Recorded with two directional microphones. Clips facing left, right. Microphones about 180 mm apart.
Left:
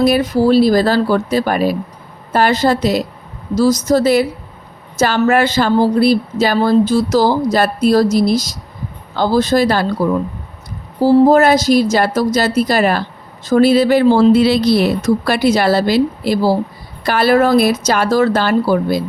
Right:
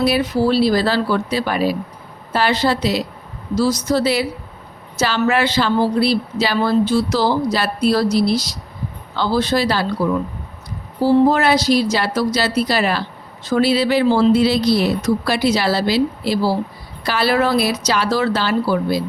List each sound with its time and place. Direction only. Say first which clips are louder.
0.0 s a woman's voice: left 4 dB; 45° left (ahead or behind)